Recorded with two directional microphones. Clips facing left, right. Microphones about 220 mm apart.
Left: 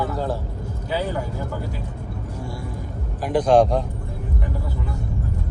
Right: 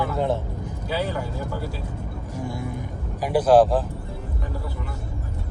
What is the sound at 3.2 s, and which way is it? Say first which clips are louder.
Speech: even; 10° right (ahead or behind).